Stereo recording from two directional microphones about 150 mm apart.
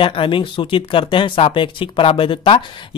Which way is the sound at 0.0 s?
35° left (ahead or behind).